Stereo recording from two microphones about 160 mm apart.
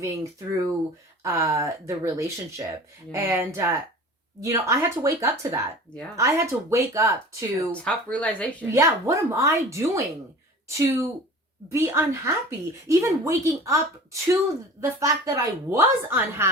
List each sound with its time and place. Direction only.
0.0 s a woman's voice: 20° right (ahead or behind)
7.7 s speech: 10° left (ahead or behind)
8.7 s a woman's voice: 20° right (ahead or behind)